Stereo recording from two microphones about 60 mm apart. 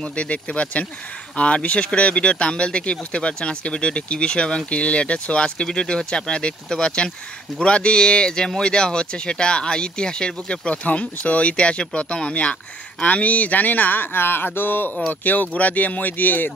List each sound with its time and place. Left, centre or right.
0.0 s speech: centre; by 14.9 s left
15.0 s speech: left